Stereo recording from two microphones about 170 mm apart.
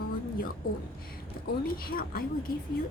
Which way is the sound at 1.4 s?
60° left (ahead or behind).